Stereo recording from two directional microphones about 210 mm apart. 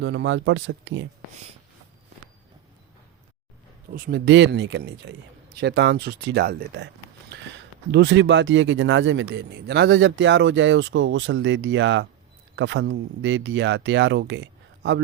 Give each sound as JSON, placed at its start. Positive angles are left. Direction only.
{"t": 0.0, "sound": "speech", "side_deg": -60}
{"t": 3.9, "sound": "speech", "side_deg": -45}